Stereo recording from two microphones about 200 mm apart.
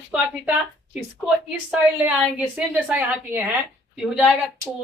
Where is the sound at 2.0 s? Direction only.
5° right (ahead or behind).